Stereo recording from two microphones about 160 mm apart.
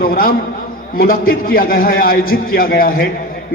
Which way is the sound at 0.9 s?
65° left (ahead or behind).